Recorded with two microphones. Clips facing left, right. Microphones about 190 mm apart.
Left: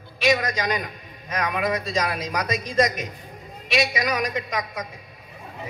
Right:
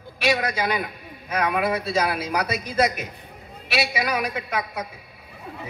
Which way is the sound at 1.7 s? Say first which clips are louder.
Right 2 dB; 10° right (ahead or behind).